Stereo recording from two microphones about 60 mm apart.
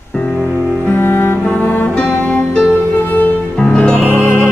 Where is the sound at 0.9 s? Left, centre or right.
Left.